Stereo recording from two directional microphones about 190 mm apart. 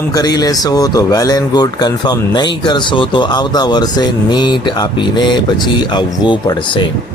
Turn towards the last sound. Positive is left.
turn(degrees=25)  # may be behind; listen again after turning